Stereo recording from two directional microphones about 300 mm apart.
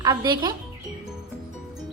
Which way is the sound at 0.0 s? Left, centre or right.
Centre.